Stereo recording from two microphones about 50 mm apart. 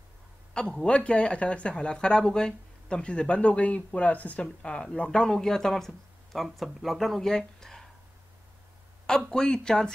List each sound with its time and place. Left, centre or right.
0.8 s speech: left
4.4 s speech: centre
9.0 s speech: centre